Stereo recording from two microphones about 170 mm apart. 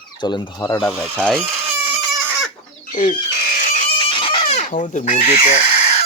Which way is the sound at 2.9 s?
55° left (ahead or behind).